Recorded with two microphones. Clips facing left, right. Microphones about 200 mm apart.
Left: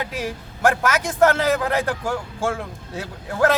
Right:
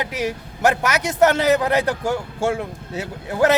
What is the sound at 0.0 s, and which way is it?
Speech, 15° right (ahead or behind).